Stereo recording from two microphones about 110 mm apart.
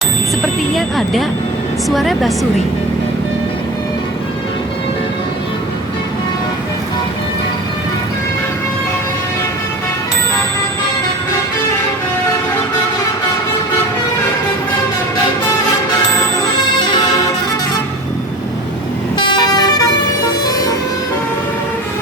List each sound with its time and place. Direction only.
0.8 s a sound: centre (ahead or behind)
1.9 s a woman's voice: centre (ahead or behind)
19.4 s vehicle: 40° left (ahead or behind)